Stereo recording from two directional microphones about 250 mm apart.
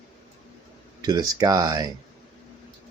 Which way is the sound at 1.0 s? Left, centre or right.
Centre.